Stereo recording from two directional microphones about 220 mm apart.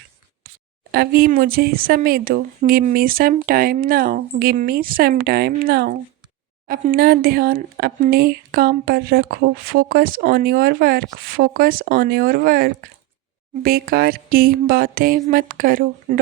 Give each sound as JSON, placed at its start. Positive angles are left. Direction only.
{"t": 0.9, "sound": "speech", "side_deg": -45}